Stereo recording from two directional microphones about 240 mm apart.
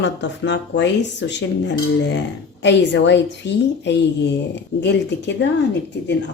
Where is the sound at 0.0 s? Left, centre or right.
Left.